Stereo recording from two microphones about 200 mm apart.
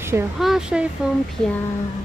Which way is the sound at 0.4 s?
Centre (ahead or behind).